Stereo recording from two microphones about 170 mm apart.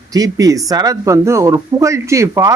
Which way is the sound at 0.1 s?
20° right (ahead or behind).